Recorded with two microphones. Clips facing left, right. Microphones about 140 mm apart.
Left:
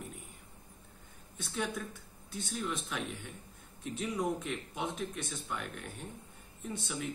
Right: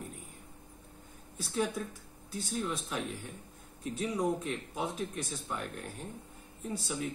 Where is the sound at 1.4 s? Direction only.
35° right (ahead or behind).